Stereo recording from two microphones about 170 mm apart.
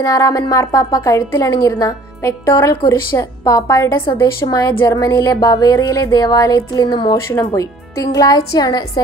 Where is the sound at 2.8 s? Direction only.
25° left (ahead or behind).